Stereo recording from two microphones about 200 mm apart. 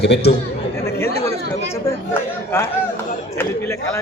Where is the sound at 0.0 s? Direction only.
55° left (ahead or behind).